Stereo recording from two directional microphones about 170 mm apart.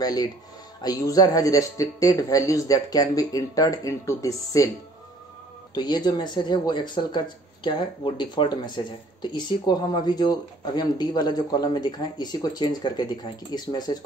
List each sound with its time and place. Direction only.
0.0 s speech: 20° left (ahead or behind)
5.8 s speech: 25° left (ahead or behind)